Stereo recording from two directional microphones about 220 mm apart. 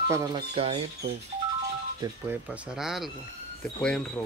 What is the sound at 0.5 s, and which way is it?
Speech, 25° right (ahead or behind).